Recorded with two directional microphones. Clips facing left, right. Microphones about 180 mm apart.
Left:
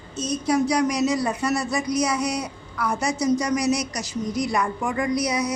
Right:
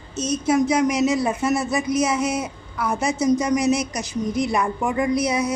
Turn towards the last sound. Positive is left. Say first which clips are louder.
# right 3 dB
turn(degrees=-25)  # may be behind; listen again after turning